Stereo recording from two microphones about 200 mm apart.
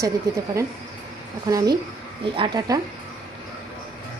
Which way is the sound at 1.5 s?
15° right (ahead or behind).